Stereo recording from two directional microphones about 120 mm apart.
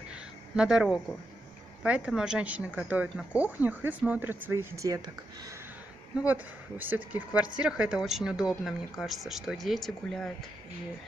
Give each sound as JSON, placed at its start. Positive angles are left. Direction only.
{"t": 0.1, "sound": "a sound", "side_deg": -5}
{"t": 1.8, "sound": "speech", "side_deg": -10}
{"t": 6.2, "sound": "speech", "side_deg": -15}